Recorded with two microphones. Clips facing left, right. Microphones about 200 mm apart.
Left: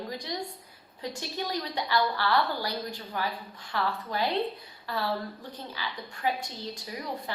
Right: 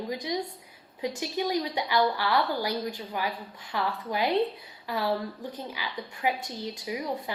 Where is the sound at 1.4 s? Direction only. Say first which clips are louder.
Right 4 dB; 15° right (ahead or behind).